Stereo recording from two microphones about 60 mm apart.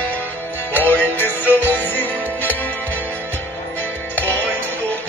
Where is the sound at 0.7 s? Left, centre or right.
Left.